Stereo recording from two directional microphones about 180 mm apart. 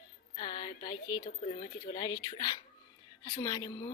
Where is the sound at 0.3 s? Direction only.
30° left (ahead or behind).